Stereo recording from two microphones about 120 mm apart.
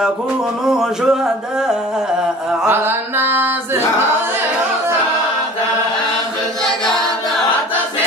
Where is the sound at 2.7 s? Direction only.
20° right (ahead or behind).